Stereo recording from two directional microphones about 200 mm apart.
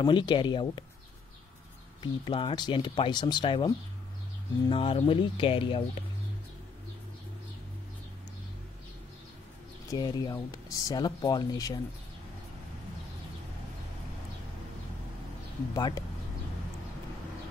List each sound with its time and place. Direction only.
0.0 s speech: 25° left (ahead or behind)
2.0 s speech: 25° left (ahead or behind)
9.8 s speech: 20° left (ahead or behind)
15.7 s speech: 20° left (ahead or behind)